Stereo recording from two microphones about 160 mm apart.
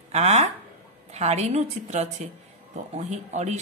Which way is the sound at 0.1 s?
45° right (ahead or behind).